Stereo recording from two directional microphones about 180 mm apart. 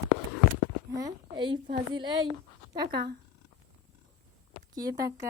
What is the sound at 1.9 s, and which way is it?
Speech, 25° right (ahead or behind).